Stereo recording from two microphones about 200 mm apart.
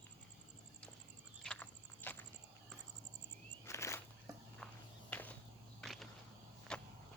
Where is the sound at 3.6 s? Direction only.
15° left (ahead or behind).